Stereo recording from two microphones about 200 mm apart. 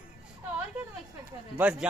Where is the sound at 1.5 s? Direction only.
5° right (ahead or behind).